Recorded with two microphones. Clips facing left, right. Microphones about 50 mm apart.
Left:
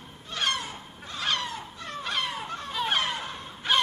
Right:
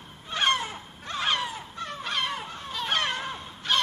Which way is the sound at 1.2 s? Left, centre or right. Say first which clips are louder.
Right 2 dB; centre.